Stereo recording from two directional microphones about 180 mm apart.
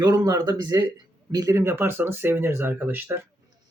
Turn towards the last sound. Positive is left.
turn(degrees=-10)  # may be behind; listen again after turning